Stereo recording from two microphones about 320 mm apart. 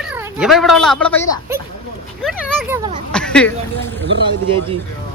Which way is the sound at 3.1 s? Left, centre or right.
Centre.